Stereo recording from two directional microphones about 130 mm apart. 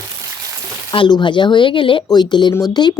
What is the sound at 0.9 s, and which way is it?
Speech, 40° left (ahead or behind).